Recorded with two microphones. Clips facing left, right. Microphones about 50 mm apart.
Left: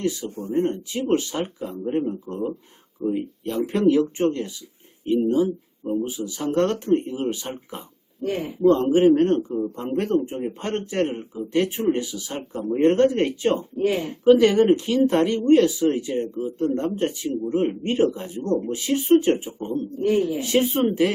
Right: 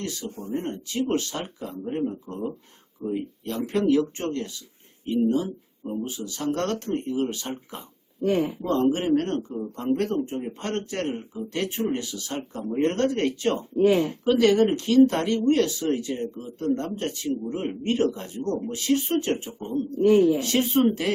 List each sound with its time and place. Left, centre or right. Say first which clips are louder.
0.0 s a man's voice: left 6 dB; centre